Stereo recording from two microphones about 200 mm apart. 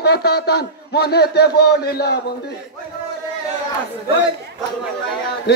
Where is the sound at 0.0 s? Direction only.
55° left (ahead or behind).